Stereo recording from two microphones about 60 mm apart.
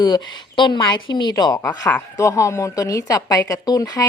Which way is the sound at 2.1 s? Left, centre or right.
Left.